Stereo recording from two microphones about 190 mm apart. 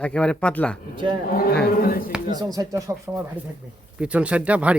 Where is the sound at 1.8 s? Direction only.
50° left (ahead or behind).